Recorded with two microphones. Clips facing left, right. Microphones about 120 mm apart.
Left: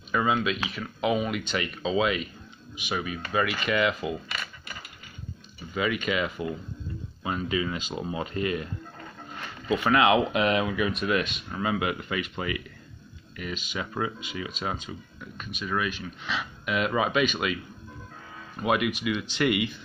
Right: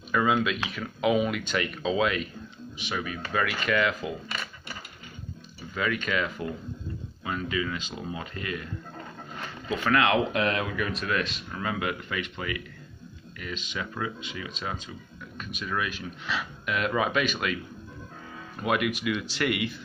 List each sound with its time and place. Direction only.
0.1 s speech: centre (ahead or behind)
5.8 s speech: 10° left (ahead or behind)
7.2 s speech: 25° left (ahead or behind)
9.8 s speech: 15° left (ahead or behind)
14.6 s speech: 10° left (ahead or behind)
18.6 s speech: 5° left (ahead or behind)